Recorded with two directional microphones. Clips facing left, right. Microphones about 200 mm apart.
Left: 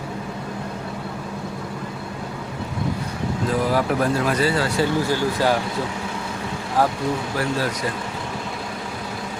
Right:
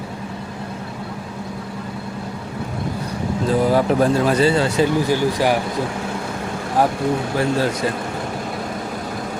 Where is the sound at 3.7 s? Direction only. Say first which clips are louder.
Right 4 dB; 25° right (ahead or behind).